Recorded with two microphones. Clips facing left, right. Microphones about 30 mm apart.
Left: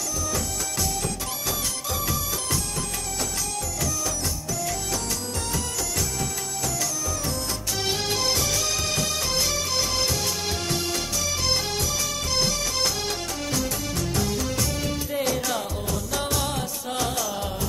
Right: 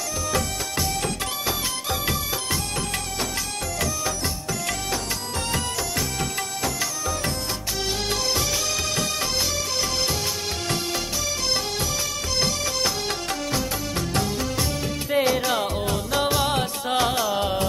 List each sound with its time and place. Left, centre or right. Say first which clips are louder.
0.7 s music: right 4 dB; right
3.8 s music: right 2 dB; right
6.1 s music: right 2 dB; right
14.6 s music: right 1 dB; right